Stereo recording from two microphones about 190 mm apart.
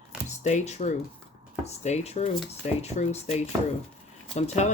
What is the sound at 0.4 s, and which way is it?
Speech, 35° left (ahead or behind).